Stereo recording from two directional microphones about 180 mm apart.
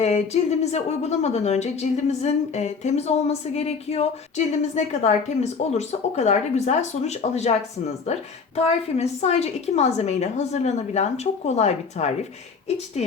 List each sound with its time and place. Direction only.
0.6 s speech: 35° left (ahead or behind)
8.5 s speech: 35° left (ahead or behind)